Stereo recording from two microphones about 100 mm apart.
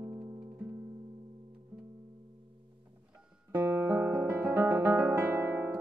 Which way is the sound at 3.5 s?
20° right (ahead or behind).